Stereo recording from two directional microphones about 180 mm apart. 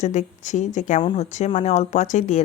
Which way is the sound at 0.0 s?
40° left (ahead or behind).